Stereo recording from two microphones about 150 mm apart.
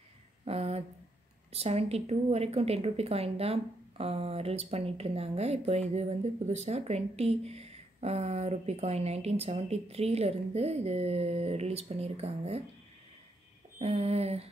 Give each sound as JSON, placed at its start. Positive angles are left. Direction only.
{"t": 0.5, "sound": "speech", "side_deg": -40}
{"t": 13.7, "sound": "speech", "side_deg": -45}